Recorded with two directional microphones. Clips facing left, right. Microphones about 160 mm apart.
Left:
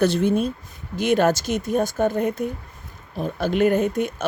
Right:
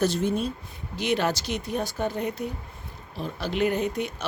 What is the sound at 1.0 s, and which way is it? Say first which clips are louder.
Speech: left 7 dB; 50° left (ahead or behind).